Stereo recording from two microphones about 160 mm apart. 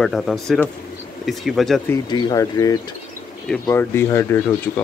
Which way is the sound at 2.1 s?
25° left (ahead or behind).